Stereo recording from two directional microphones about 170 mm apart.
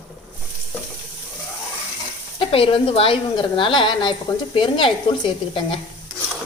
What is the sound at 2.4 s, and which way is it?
A woman's voice, 30° left (ahead or behind).